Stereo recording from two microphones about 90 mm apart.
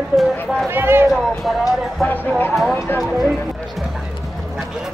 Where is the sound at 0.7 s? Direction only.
25° right (ahead or behind).